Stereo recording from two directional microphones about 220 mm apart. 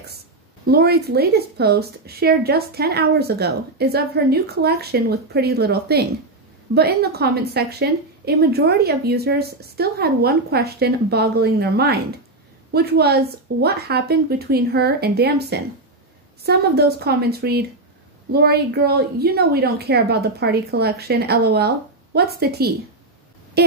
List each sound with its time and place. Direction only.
0.7 s a woman's voice: 45° right (ahead or behind)